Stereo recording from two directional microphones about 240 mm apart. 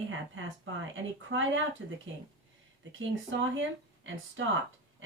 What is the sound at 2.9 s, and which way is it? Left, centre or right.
Speech, right.